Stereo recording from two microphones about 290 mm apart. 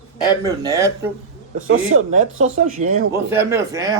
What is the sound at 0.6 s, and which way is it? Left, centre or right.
Speech, centre.